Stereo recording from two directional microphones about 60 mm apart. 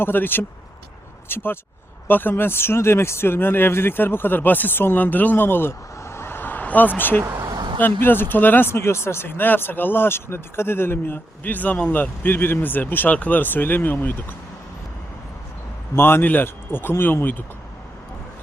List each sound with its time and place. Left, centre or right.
0.0 s speech: left
6.0 s vehicle: left
7.2 s vehicle: right
7.8 s speech: left
16.0 s speech: left